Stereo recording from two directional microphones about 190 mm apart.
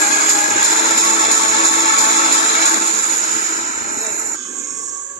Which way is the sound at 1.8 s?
50° left (ahead or behind).